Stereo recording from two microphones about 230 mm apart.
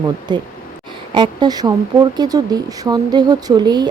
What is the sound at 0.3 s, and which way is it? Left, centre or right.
Speech, centre.